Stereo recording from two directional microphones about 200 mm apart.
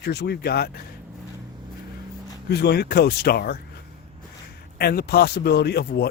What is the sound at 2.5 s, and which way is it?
Speech, 55° left (ahead or behind).